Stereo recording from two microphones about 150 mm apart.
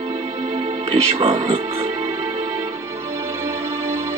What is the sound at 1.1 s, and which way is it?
Speech, 40° right (ahead or behind).